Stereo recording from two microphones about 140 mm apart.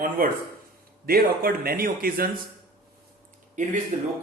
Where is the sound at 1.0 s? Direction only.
90° right.